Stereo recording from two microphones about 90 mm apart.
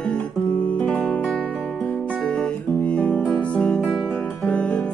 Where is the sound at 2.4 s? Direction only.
15° left (ahead or behind).